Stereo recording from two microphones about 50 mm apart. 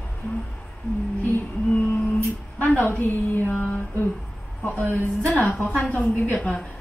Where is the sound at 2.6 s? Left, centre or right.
Left.